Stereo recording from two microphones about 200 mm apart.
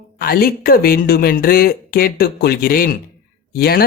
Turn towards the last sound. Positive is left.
turn(degrees=50)  # may be behind; listen again after turning